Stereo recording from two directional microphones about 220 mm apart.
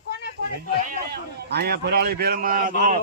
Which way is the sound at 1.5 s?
45° right (ahead or behind).